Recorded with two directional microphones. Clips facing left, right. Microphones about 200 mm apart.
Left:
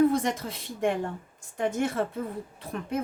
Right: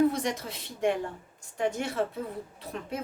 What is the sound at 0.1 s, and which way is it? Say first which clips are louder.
Speech: left 4 dB; 50° left (ahead or behind).